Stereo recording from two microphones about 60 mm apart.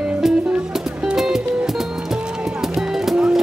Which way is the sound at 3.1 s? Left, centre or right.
Centre.